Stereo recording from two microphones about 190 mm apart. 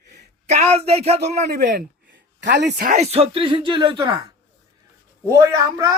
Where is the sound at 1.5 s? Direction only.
60° right (ahead or behind).